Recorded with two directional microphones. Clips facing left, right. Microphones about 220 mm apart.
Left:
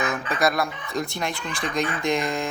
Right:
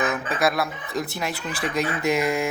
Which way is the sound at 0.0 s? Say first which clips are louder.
Right 1 dB; centre (ahead or behind).